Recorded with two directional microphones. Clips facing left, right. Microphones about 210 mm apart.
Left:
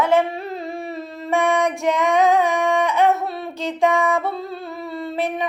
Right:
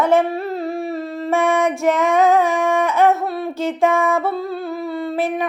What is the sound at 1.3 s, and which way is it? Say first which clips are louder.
Female singing: right 1 dB; 15° left (ahead or behind).